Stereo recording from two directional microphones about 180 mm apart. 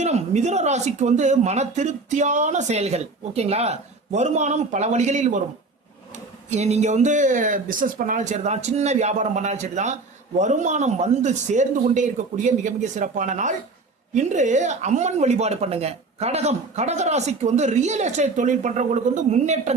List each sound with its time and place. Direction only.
0.0 s speech: 40° right (ahead or behind)
6.5 s speech: 40° right (ahead or behind)